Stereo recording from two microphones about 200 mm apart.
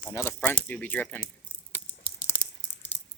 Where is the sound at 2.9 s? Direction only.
35° left (ahead or behind).